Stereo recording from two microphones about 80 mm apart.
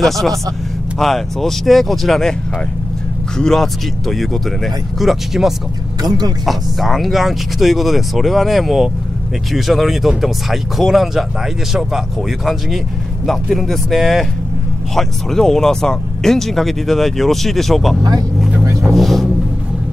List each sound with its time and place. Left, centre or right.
0.0 s speech: centre
3.3 s speech: centre
6.0 s speech: right
6.4 s speech: centre
13.3 s speech: centre
18.9 s vehicle: centre